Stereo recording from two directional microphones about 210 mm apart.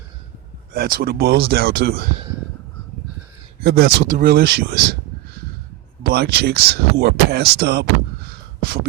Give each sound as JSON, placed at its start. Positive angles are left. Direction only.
{"t": 0.7, "sound": "speech", "side_deg": -45}
{"t": 3.6, "sound": "speech", "side_deg": -50}
{"t": 6.0, "sound": "speech", "side_deg": -50}
{"t": 8.6, "sound": "beatboxing", "side_deg": -50}